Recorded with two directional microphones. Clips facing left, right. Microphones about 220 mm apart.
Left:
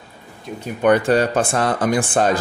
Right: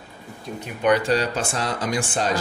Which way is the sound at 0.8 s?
55° left (ahead or behind).